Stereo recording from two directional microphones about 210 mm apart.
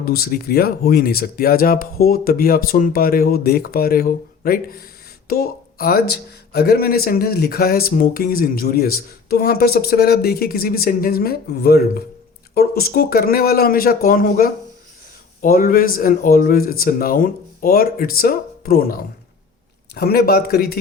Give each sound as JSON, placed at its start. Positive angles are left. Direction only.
{"t": 0.0, "sound": "speech", "side_deg": 45}